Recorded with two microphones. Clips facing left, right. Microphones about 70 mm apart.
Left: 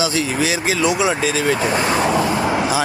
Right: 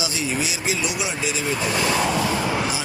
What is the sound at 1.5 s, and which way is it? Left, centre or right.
Speech, left.